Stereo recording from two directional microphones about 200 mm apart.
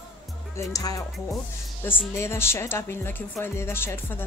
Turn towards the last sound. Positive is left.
turn(degrees=10)  # may be behind; listen again after turning